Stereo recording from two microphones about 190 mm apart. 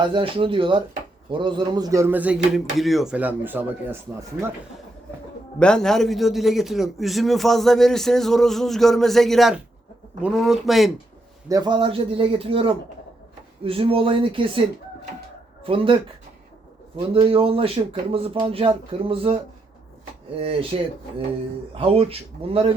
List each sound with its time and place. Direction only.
0.0 s speech: 25° right (ahead or behind)
5.5 s a man's voice: 5° left (ahead or behind)
11.4 s speech: 20° right (ahead or behind)
15.6 s speech: 30° right (ahead or behind)
17.2 s speech: 30° right (ahead or behind)
20.4 s speech: 30° right (ahead or behind)
21.8 s speech: 30° right (ahead or behind)